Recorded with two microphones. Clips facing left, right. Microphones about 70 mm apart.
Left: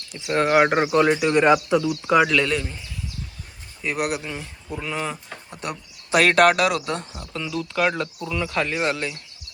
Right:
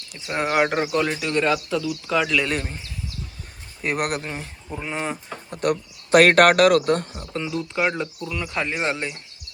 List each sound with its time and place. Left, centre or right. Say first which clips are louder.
0.1 s speech: left 4 dB; centre
2.5 s speech: left 1 dB; right
3.8 s speech: right 1 dB; right
4.8 s speech: even; right
5.5 s speech: right 10 dB; right
7.3 s speech: right 1 dB; right
7.7 s speech: left 3 dB; centre
8.5 s speech: left 1 dB; centre